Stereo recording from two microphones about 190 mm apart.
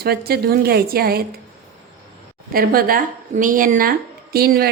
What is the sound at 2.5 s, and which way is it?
Speech, 50° right (ahead or behind).